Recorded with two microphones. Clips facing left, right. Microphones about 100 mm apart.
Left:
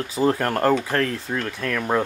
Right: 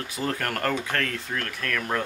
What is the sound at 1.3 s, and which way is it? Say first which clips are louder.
Speech: left 3 dB; 20° left (ahead or behind).